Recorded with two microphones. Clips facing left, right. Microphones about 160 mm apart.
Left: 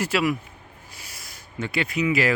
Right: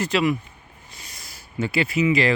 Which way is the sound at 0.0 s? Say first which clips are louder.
Right 2 dB; 5° left (ahead or behind).